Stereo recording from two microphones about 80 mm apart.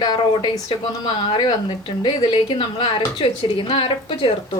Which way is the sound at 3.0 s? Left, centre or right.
Left.